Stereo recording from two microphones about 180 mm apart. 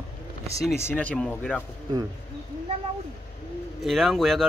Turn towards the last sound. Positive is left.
turn(degrees=0)  # may be behind; listen again after turning